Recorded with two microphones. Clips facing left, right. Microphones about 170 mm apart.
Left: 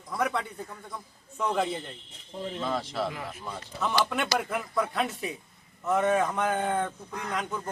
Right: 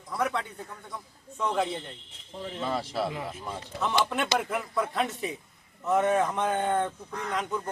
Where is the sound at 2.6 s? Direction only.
10° right (ahead or behind).